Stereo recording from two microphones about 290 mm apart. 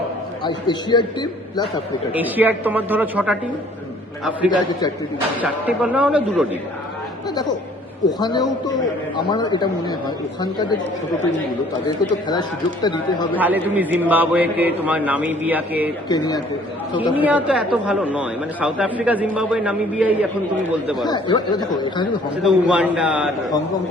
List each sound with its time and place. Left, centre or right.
0.4 s a man's voice: centre
2.1 s a man's voice: centre
7.3 s a man's voice: centre
12.3 s a man's voice: centre
13.3 s a man's voice: centre
16.0 s a man's voice: centre
17.2 s a man's voice: centre
21.1 s a man's voice: centre
22.4 s a man's voice: centre